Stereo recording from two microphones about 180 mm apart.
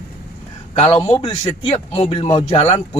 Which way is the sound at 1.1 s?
25° left (ahead or behind).